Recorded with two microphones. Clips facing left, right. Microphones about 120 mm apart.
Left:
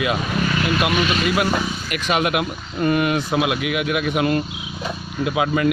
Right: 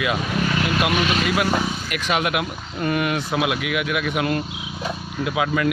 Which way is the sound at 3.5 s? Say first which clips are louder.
Left 2 dB; 40° left (ahead or behind).